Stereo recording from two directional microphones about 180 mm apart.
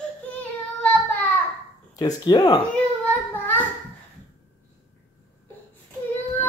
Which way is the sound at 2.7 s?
10° left (ahead or behind).